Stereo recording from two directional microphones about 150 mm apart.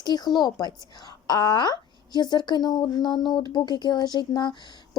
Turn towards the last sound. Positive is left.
turn(degrees=30)  # may be behind; listen again after turning